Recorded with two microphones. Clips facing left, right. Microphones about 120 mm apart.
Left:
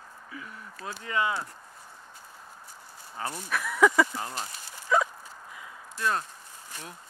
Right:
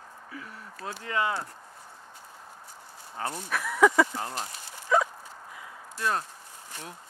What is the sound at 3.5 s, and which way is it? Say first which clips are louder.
Speech: right 1 dB; 30° right (ahead or behind).